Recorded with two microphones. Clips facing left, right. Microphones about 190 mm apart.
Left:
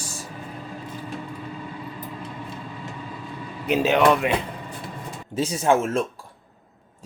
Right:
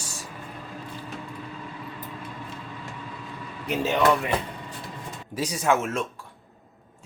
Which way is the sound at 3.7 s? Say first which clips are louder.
Left 4 dB; 70° left (ahead or behind).